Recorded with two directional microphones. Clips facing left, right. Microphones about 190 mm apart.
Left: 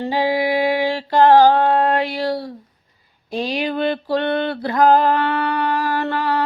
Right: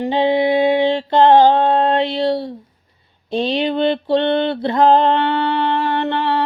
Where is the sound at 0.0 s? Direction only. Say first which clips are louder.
Right 3 dB; 25° right (ahead or behind).